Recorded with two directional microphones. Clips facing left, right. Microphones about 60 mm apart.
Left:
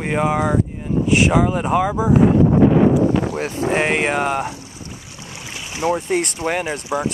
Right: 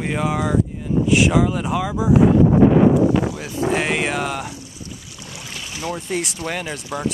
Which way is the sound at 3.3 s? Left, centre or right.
Left.